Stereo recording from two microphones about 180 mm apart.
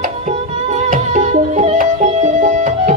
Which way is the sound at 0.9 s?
45° right (ahead or behind).